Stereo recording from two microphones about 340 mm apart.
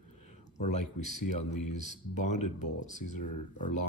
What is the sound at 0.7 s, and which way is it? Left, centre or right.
Speech, centre.